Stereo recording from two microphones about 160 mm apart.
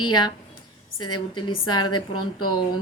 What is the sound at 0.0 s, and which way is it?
Speech, 25° left (ahead or behind).